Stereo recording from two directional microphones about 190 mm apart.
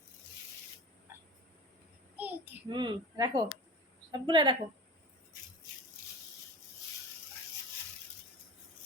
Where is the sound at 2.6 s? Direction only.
25° right (ahead or behind).